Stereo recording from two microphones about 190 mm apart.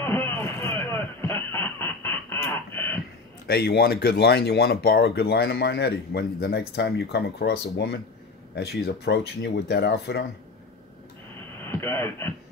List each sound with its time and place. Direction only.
0.0 s a sound: 10° left (ahead or behind)
3.4 s speech: 55° left (ahead or behind)
11.6 s speech: 10° left (ahead or behind)